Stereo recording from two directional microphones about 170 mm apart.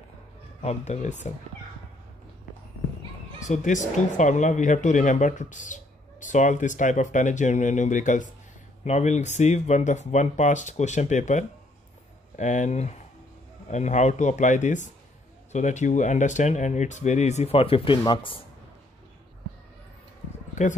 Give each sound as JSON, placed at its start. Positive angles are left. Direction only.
{"t": 0.6, "sound": "speech", "side_deg": 40}
{"t": 3.3, "sound": "speech", "side_deg": 45}